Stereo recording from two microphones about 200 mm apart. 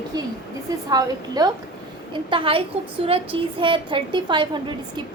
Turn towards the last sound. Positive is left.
turn(degrees=-25)  # may be behind; listen again after turning